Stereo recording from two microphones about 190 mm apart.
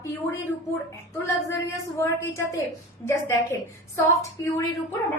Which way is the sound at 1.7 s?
15° left (ahead or behind).